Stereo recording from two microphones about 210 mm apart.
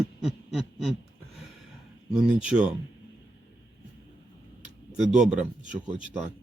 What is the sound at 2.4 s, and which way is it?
Speech, 5° right (ahead or behind).